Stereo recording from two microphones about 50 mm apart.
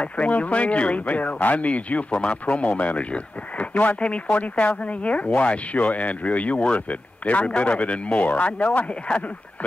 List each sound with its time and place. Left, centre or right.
0.0 s speech: left